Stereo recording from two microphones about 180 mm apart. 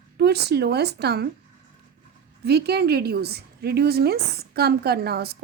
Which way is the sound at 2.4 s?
65° right (ahead or behind).